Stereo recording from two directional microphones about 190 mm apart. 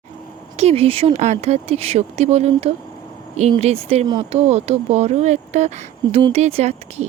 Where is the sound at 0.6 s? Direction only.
35° right (ahead or behind).